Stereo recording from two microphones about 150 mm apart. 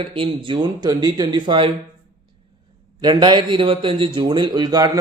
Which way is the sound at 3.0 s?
30° right (ahead or behind).